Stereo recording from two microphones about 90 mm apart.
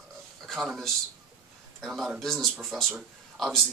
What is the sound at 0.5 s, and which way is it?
Speech, centre (ahead or behind).